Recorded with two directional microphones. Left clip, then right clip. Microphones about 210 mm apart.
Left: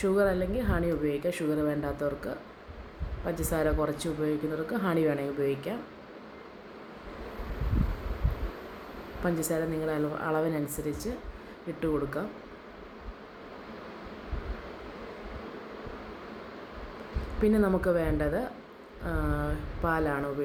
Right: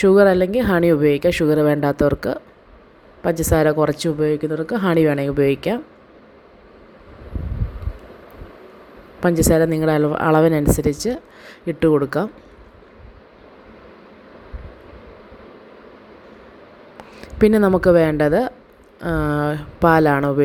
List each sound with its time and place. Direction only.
0.0 s a woman's voice: 40° right (ahead or behind)
9.2 s a woman's voice: 45° right (ahead or behind)
17.4 s a woman's voice: 45° right (ahead or behind)